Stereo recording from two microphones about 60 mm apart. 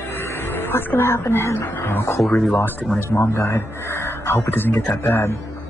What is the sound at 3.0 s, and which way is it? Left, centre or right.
Speech, left.